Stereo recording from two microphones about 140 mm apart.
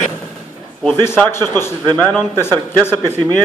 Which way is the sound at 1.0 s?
15° left (ahead or behind).